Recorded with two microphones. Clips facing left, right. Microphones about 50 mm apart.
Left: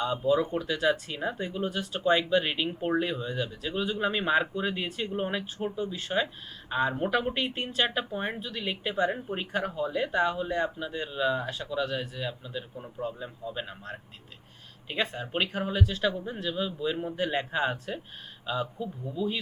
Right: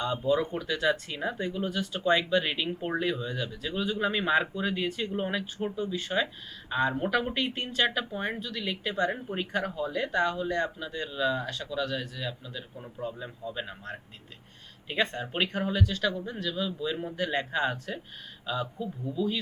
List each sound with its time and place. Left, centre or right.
0.0 s speech: centre
5.5 s speech: centre
12.8 s a man's voice: centre; by 16.7 s left
17.0 s a man's voice: centre